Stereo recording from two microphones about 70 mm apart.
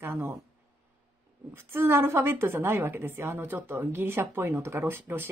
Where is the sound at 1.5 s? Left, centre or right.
Right.